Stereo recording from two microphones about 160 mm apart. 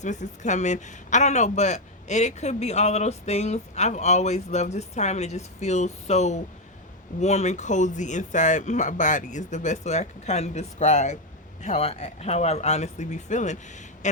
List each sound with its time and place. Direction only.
0.0 s speech: 50° left (ahead or behind)